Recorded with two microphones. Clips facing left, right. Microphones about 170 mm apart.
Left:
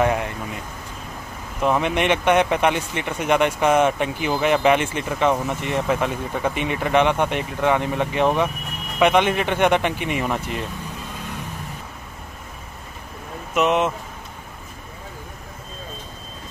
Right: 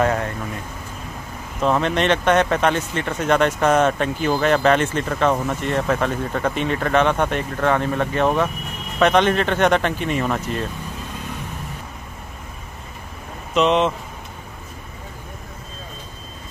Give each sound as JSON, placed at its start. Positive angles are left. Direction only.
{"t": 0.0, "sound": "speech", "side_deg": 15}
{"t": 1.6, "sound": "speech", "side_deg": 15}
{"t": 13.6, "sound": "speech", "side_deg": 10}